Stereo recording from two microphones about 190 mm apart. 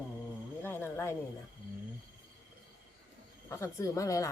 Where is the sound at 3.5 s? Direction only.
15° left (ahead or behind).